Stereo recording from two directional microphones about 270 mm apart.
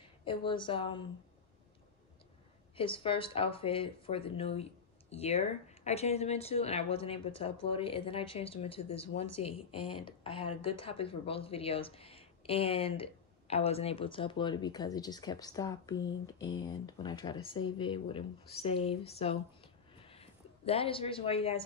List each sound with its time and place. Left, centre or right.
0.2 s a woman's voice: centre
2.7 s a woman's voice: centre
9.2 s a woman's voice: left
9.5 s a woman's voice: centre